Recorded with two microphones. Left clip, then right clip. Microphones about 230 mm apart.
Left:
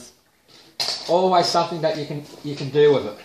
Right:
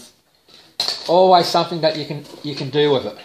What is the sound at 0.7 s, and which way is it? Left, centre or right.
Cutlery, right.